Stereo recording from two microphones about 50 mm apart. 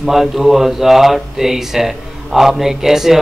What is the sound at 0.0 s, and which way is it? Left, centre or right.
Speech, centre.